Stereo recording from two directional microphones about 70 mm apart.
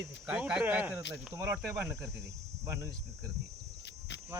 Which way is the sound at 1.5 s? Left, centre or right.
Centre.